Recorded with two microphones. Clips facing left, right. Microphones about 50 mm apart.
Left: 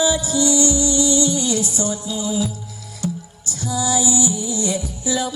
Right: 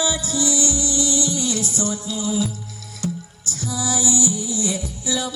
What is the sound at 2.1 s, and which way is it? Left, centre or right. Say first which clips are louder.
Music: even; right.